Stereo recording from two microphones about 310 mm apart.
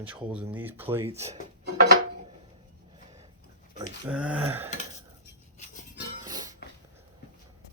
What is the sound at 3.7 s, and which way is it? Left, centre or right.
Speech, centre.